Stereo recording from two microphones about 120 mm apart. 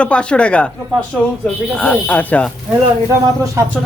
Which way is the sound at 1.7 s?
10° left (ahead or behind).